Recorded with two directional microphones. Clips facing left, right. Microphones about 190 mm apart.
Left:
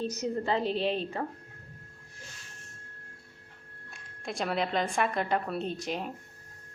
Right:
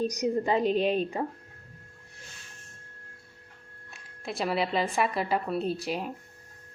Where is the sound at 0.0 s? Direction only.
15° right (ahead or behind).